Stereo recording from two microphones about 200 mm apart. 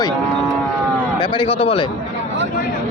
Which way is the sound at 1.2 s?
25° left (ahead or behind).